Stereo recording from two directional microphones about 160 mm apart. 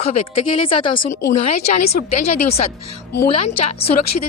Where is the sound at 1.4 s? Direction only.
45° left (ahead or behind).